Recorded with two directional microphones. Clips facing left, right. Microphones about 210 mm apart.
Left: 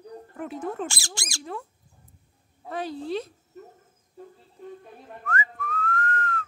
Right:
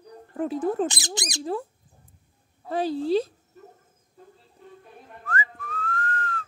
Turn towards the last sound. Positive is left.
turn(degrees=-30)  # may be behind; listen again after turning